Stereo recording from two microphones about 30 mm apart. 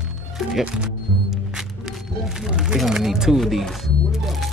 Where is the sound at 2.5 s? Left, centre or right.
Right.